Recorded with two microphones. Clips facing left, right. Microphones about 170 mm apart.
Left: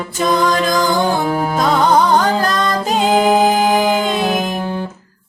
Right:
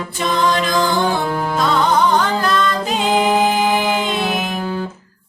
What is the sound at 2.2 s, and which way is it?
Music, 45° left (ahead or behind).